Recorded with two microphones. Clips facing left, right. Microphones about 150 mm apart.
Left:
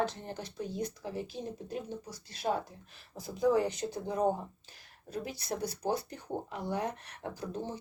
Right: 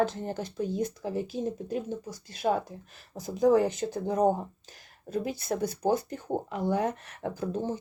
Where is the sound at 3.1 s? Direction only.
45° right (ahead or behind).